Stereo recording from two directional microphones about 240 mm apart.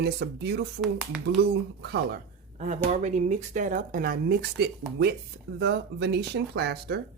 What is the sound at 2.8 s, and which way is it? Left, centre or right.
Speech, right.